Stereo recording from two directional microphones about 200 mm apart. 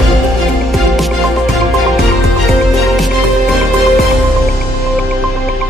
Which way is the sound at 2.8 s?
Centre (ahead or behind).